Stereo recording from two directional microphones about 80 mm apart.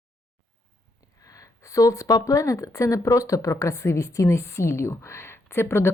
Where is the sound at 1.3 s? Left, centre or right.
Left.